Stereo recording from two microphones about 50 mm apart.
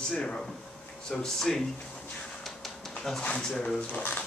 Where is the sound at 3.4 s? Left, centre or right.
Centre.